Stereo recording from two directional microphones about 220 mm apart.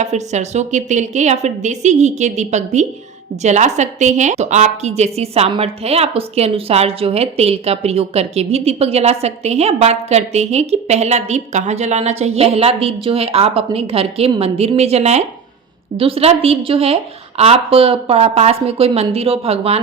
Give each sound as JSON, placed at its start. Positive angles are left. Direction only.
{"t": 0.0, "sound": "a woman's voice", "side_deg": -30}